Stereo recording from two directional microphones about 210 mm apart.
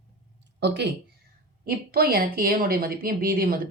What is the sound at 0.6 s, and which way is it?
A woman's voice, 55° right (ahead or behind).